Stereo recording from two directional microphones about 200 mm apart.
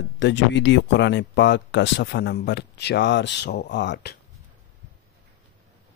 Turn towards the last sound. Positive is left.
turn(degrees=60)  # may be behind; listen again after turning